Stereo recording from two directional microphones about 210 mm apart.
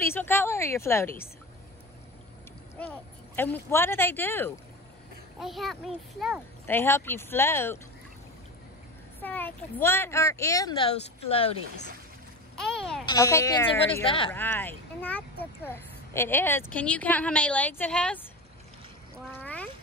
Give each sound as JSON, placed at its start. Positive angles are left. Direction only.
{"t": 0.0, "sound": "a woman's voice", "side_deg": 10}
{"t": 2.8, "sound": "a woman's voice", "side_deg": 5}
{"t": 5.4, "sound": "a child's voice", "side_deg": 0}
{"t": 6.6, "sound": "a woman's voice", "side_deg": 10}
{"t": 9.2, "sound": "a woman's voice", "side_deg": 10}
{"t": 12.5, "sound": "a sound", "side_deg": 0}
{"t": 13.0, "sound": "a woman's voice", "side_deg": 15}
{"t": 14.0, "sound": "speech", "side_deg": 25}
{"t": 14.3, "sound": "a woman's voice", "side_deg": 10}
{"t": 19.4, "sound": "a sound", "side_deg": 5}